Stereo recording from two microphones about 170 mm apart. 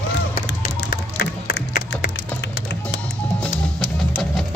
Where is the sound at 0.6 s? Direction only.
65° left (ahead or behind).